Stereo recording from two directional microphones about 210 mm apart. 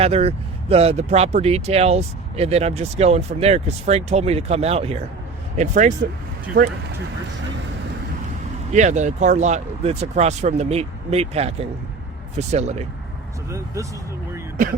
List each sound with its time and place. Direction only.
0.0 s speech: 30° right (ahead or behind)
8.7 s speech: 35° right (ahead or behind)